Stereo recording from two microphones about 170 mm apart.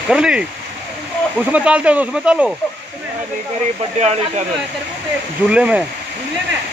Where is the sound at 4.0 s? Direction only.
40° right (ahead or behind).